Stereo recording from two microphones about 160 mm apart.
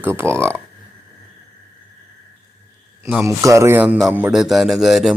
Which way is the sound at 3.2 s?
20° right (ahead or behind).